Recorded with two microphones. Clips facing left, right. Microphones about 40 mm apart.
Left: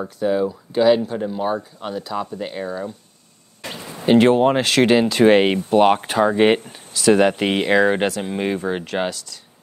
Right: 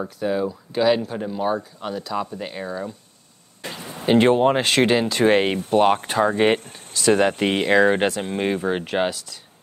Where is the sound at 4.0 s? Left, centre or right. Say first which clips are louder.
Left 2 dB; centre.